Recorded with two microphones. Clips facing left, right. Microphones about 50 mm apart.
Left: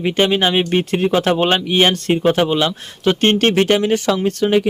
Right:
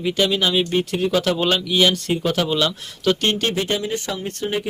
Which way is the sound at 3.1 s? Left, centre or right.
Left.